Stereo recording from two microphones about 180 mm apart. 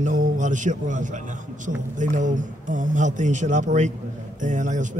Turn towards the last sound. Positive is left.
turn(degrees=-45)  # may be behind; listen again after turning